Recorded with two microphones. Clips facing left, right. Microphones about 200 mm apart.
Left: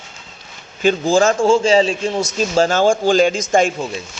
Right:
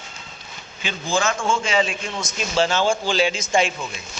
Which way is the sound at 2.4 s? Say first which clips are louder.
Left 5 dB; 45° left (ahead or behind).